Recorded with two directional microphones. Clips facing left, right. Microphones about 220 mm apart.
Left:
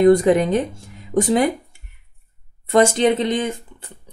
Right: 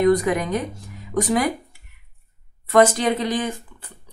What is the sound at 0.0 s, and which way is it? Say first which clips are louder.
A woman's voice: left 5 dB; 30° left (ahead or behind).